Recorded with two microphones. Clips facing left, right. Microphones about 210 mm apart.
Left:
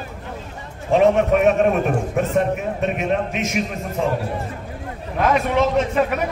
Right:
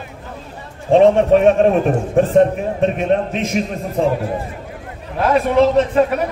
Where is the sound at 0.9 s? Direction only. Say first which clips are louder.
Right 5 dB; 30° right (ahead or behind).